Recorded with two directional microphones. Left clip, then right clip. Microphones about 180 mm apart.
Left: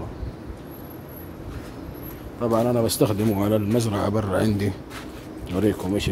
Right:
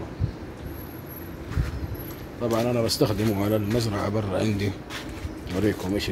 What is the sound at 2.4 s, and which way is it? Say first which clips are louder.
A man's voice: left 3 dB; 20° left (ahead or behind).